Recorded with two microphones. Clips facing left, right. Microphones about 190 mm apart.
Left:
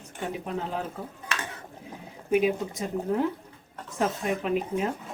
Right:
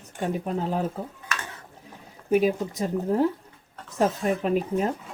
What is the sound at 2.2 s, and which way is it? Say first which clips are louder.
Speech: right 2 dB; 40° right (ahead or behind).